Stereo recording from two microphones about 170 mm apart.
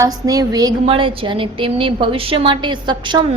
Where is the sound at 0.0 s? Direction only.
20° right (ahead or behind).